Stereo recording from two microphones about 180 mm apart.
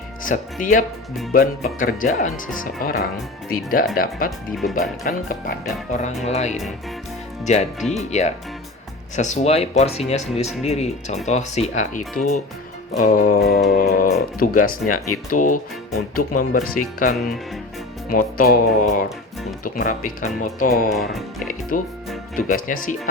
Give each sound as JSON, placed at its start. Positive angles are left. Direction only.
{"t": 0.3, "sound": "speech", "side_deg": 50}
{"t": 6.2, "sound": "speech", "side_deg": 40}
{"t": 7.8, "sound": "speech", "side_deg": 0}
{"t": 9.1, "sound": "speech", "side_deg": 40}
{"t": 21.1, "sound": "speech", "side_deg": 0}
{"t": 21.7, "sound": "speech", "side_deg": 45}